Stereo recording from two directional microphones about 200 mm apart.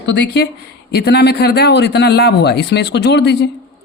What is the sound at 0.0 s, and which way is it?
A woman's voice, 60° left (ahead or behind).